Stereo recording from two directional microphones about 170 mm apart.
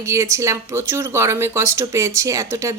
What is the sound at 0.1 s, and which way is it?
A woman's voice, 15° right (ahead or behind).